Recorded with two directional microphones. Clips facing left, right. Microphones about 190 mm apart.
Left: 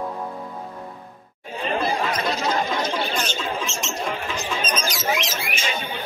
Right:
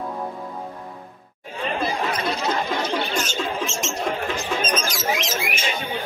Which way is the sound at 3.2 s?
45° right (ahead or behind).